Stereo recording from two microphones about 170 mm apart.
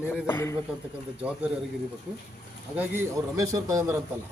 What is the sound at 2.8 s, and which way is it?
A man's voice, 15° right (ahead or behind).